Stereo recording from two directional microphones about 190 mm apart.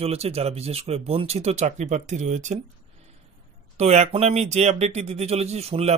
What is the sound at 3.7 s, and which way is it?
Speech, 35° right (ahead or behind).